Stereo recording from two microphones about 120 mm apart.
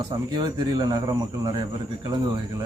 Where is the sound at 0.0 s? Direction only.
30° right (ahead or behind).